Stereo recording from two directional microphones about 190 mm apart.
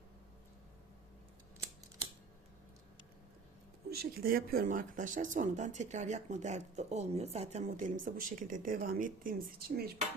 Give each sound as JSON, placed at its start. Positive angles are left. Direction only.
{"t": 3.8, "sound": "speech", "side_deg": -55}